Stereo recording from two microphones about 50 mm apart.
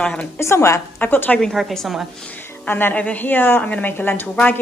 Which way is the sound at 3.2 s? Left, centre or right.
Left.